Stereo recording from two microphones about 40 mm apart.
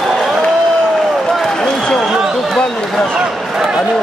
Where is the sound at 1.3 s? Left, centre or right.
Centre.